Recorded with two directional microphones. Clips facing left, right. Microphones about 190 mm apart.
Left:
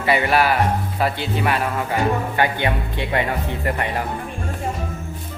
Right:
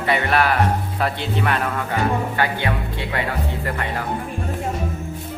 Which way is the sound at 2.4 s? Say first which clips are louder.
Left 2 dB; 20° left (ahead or behind).